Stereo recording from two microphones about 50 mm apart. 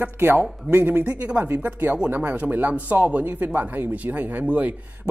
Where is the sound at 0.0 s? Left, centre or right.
Right.